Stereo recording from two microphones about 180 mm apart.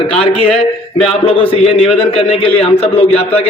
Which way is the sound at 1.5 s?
35° left (ahead or behind).